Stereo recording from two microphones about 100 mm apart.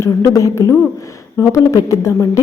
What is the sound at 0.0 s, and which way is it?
A woman's voice, 30° left (ahead or behind).